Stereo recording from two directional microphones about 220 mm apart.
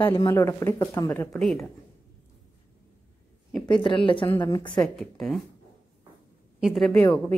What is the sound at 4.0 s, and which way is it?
Speech, 25° left (ahead or behind).